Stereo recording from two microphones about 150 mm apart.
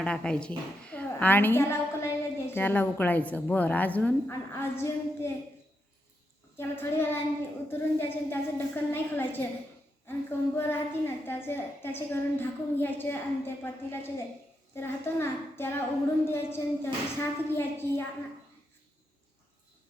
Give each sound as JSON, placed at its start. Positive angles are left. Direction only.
{"t": 0.0, "sound": "a woman's voice", "side_deg": 5}
{"t": 6.6, "sound": "a woman's voice", "side_deg": 15}